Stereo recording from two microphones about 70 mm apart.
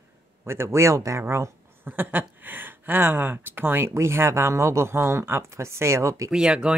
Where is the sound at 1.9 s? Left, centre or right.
Right.